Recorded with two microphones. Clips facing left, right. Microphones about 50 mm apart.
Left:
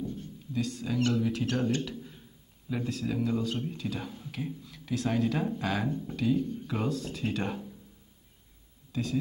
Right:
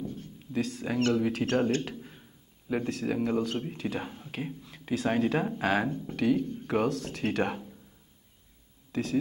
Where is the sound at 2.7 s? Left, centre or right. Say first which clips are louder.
Right 3 dB; right.